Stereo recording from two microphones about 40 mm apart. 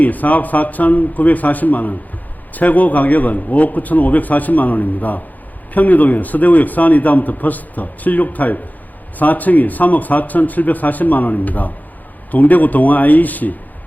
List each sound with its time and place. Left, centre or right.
0.0 s a man's voice: left